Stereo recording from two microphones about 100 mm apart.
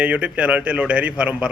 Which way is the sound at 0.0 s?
15° right (ahead or behind).